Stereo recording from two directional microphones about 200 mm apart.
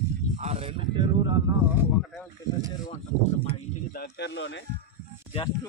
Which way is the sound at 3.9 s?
60° left (ahead or behind).